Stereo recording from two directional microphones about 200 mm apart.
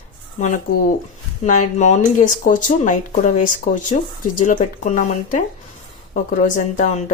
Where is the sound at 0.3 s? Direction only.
35° left (ahead or behind).